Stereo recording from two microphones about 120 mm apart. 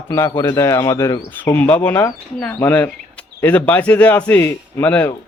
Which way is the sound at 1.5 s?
15° left (ahead or behind).